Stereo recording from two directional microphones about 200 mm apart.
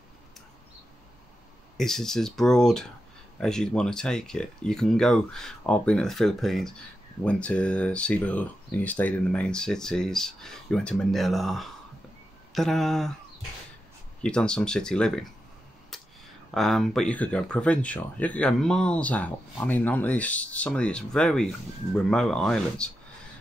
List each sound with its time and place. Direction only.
1.8 s speech: centre (ahead or behind)
14.2 s speech: 5° left (ahead or behind)
15.9 s a sound: centre (ahead or behind)
16.5 s speech: centre (ahead or behind)